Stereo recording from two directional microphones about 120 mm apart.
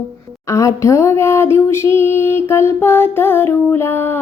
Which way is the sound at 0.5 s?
25° left (ahead or behind).